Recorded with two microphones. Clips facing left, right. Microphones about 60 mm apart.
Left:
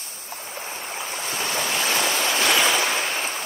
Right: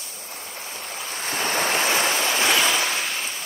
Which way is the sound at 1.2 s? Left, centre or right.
Right.